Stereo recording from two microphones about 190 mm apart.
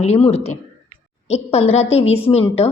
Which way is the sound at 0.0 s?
35° left (ahead or behind).